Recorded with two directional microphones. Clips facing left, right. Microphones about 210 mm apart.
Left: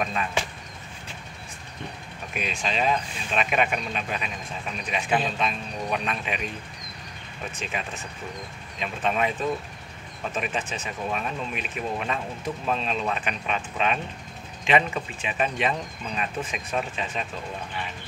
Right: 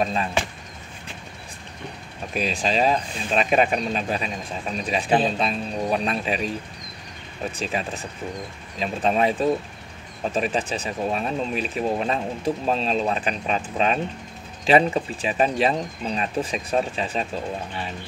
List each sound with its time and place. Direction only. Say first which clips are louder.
0.0 s speech: right 4 dB; 30° right (ahead or behind)
2.3 s speech: right 6 dB; 35° right (ahead or behind)
7.5 s speech: right 5 dB; 35° right (ahead or behind)